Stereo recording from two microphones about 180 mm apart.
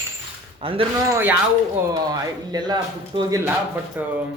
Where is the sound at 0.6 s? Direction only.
30° right (ahead or behind).